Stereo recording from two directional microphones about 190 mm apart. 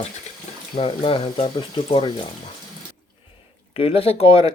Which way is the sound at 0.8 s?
30° left (ahead or behind).